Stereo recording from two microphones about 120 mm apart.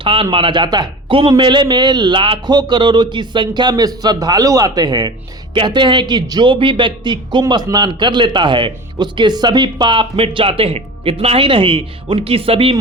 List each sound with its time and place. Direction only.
0.0 s a man's voice: 45° right (ahead or behind)